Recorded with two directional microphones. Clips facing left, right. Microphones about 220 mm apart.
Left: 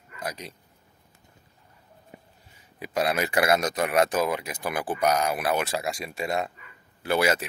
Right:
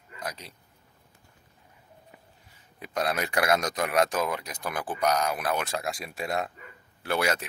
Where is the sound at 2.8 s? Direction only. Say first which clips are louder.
Left 3 dB; 5° left (ahead or behind).